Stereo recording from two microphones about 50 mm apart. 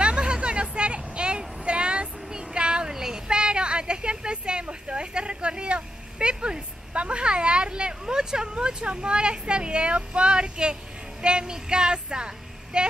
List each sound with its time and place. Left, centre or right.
0.0 s a sound: centre
1.6 s child singing: right
11.2 s speech: centre